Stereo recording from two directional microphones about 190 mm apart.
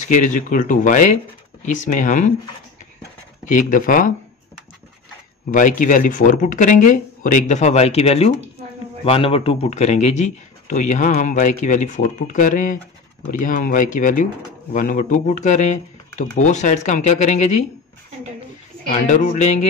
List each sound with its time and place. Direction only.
0.0 s a man's voice: 40° left (ahead or behind)
3.4 s speech: 45° left (ahead or behind)
5.5 s a man's voice: 45° left (ahead or behind)
19.0 s a man's voice: 35° left (ahead or behind)